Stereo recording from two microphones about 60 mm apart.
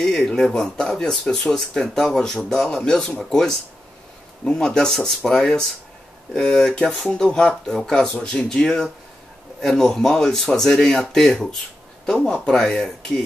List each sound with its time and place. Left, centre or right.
0.0 s speech: centre